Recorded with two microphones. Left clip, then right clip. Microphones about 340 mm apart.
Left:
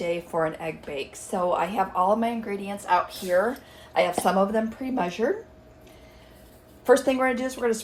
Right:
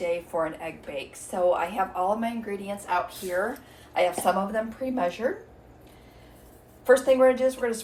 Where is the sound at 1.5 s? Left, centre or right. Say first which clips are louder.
Left 1 dB; left.